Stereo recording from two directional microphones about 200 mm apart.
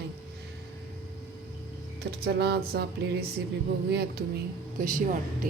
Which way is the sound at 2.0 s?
55° right (ahead or behind).